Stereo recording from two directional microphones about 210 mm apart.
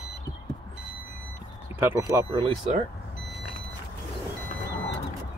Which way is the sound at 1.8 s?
15° right (ahead or behind).